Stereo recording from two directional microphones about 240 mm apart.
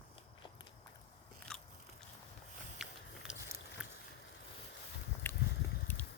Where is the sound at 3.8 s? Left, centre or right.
Centre.